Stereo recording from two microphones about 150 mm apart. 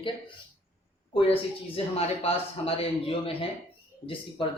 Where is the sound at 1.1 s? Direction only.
40° left (ahead or behind).